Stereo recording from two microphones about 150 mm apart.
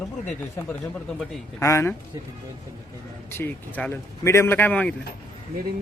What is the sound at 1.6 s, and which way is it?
Speech, 20° left (ahead or behind).